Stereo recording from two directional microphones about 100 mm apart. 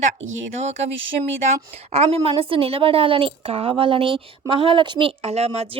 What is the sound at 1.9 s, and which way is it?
Speech, 90° right.